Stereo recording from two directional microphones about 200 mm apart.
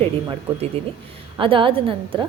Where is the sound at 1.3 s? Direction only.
25° right (ahead or behind).